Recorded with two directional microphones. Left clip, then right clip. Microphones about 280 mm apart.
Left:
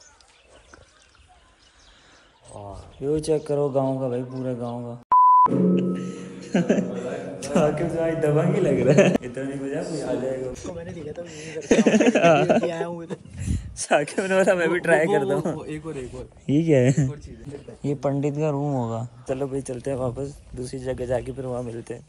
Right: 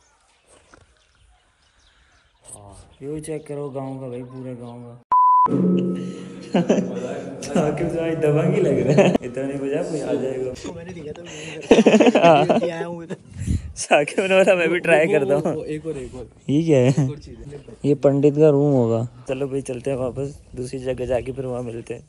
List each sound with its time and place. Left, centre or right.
3.1 s a man's voice: centre
5.1 s music: centre
7.4 s speech: centre
17.8 s speech: centre
18.6 s speech: right
19.2 s speech: centre